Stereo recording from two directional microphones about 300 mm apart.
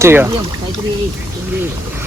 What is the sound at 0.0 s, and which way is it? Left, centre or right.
Speech, centre.